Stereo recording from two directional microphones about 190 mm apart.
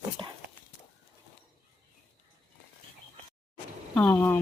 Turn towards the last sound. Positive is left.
turn(degrees=10)  # may be behind; listen again after turning